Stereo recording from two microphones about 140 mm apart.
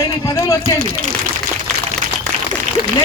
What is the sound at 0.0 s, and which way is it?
Speech, 20° left (ahead or behind).